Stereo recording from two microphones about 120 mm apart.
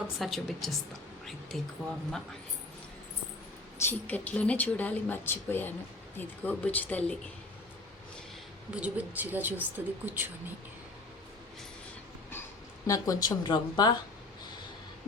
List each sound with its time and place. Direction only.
0.2 s a woman's voice: centre (ahead or behind)
3.8 s speech: 15° left (ahead or behind)
8.7 s speech: 10° right (ahead or behind)
12.9 s speech: 30° left (ahead or behind)